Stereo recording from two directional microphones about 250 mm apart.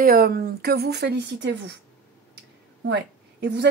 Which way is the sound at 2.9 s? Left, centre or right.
Right.